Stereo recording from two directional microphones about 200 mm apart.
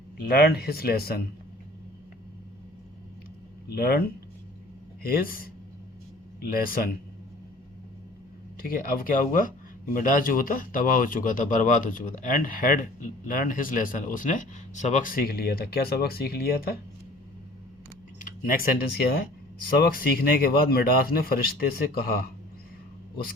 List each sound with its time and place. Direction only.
0.3 s speech: 50° left (ahead or behind)
3.8 s speech: 50° left (ahead or behind)
5.0 s speech: 45° left (ahead or behind)
6.5 s speech: 45° left (ahead or behind)
8.6 s speech: 45° left (ahead or behind)
18.2 s speech: 45° left (ahead or behind)